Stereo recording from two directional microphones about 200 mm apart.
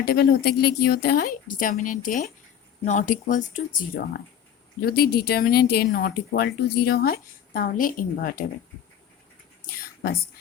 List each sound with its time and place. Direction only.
0.0 s speech: 50° left (ahead or behind)